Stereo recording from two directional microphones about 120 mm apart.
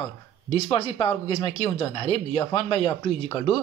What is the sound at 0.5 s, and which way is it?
A man's voice, 55° left (ahead or behind).